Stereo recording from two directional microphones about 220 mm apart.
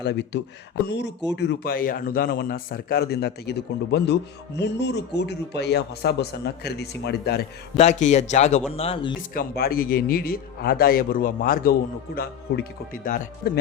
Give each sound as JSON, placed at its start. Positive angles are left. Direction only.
{"t": 0.0, "sound": "a man's voice", "side_deg": 50}
{"t": 7.8, "sound": "a man's voice", "side_deg": 30}
{"t": 9.3, "sound": "a man's voice", "side_deg": 40}